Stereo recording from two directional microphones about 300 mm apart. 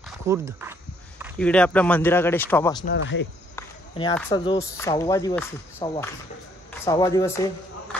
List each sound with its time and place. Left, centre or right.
0.3 s speech: centre
1.2 s a man's voice: centre
2.8 s speech: left
3.5 s a man's voice: centre